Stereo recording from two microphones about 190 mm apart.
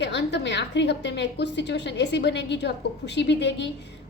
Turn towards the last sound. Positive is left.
turn(degrees=65)  # may be behind; listen again after turning